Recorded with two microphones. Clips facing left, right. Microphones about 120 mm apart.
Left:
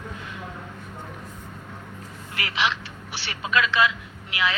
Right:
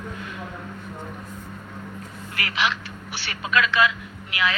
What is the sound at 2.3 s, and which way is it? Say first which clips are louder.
Speech: even; 25° left (ahead or behind).